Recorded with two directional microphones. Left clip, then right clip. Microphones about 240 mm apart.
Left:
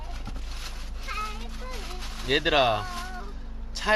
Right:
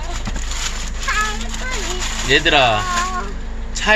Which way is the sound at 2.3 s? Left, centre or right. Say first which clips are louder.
Right 9 dB; left.